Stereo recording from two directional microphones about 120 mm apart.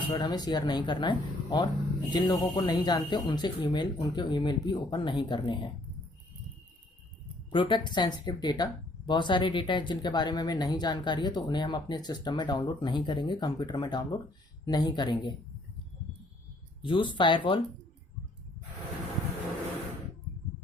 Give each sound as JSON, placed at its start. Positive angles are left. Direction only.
{"t": 0.1, "sound": "speech", "side_deg": 35}
{"t": 7.5, "sound": "speech", "side_deg": 45}
{"t": 16.8, "sound": "speech", "side_deg": 45}